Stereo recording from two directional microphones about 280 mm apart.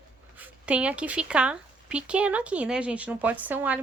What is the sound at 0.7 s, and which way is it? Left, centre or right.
Speech, centre.